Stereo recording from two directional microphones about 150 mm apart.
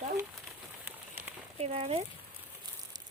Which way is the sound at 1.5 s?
45° right (ahead or behind).